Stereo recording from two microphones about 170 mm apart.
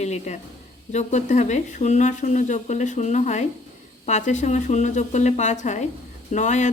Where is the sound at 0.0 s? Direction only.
40° left (ahead or behind).